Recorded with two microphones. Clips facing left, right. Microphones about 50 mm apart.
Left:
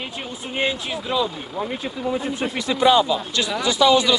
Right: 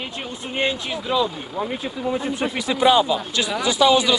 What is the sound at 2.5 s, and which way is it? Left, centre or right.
Speech, centre.